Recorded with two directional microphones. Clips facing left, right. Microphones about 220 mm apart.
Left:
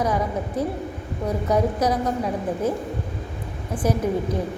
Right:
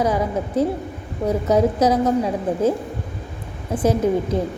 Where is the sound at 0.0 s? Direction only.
25° right (ahead or behind).